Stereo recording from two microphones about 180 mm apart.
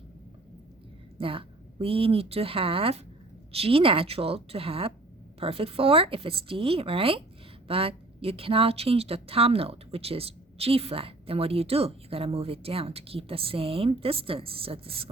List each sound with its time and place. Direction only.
1.2 s speech: 30° right (ahead or behind)